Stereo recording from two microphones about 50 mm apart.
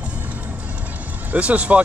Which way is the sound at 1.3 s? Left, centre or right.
Right.